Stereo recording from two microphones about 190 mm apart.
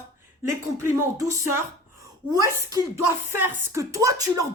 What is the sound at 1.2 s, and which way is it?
Speech, 15° right (ahead or behind).